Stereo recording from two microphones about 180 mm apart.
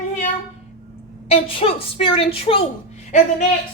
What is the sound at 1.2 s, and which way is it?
A woman's voice, 35° left (ahead or behind).